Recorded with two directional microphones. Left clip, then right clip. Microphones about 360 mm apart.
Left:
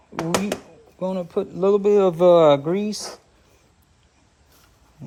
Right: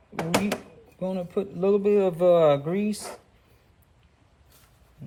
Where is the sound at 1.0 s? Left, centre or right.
Centre.